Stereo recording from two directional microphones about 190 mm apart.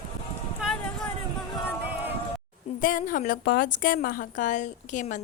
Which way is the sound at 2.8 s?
45° left (ahead or behind).